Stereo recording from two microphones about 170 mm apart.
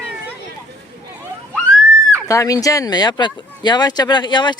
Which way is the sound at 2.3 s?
20° left (ahead or behind).